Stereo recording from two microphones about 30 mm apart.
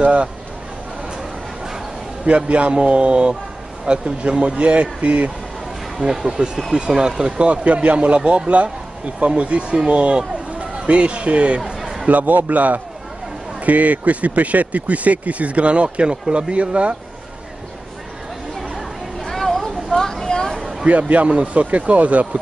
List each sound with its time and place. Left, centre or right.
0.0 s speech: right
2.2 s speech: right
5.0 s a man's voice: right
6.0 s speech: right
7.5 s speech: right
11.6 s a sound: centre
12.1 s a man's voice: right
19.2 s a sound: centre
20.0 s a sound: centre
21.3 s speech: right